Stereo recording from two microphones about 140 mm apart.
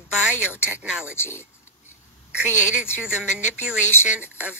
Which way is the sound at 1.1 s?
15° left (ahead or behind).